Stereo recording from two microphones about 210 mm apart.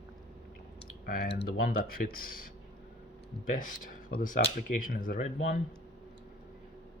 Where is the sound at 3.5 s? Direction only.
40° left (ahead or behind).